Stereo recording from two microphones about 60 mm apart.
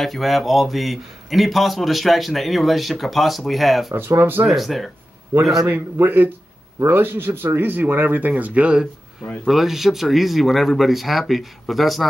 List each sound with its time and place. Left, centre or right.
0.0 s speech: centre
4.2 s speech: right
4.5 s speech: centre
5.7 s speech: right
9.4 s speech: centre